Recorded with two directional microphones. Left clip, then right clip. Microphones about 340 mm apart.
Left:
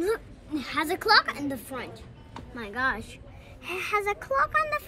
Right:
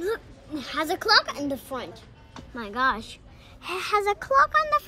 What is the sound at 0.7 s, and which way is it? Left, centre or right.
Speech, centre.